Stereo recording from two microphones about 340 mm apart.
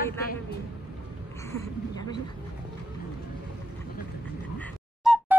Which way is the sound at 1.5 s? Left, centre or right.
Centre.